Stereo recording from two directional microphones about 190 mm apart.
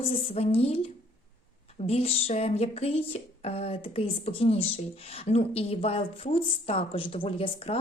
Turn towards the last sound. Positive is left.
turn(degrees=30)  # may be behind; listen again after turning